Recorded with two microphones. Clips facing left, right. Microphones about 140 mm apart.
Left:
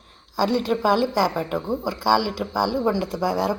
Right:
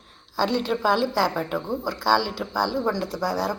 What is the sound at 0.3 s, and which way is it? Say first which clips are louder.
A woman's voice: left 2 dB; 10° left (ahead or behind).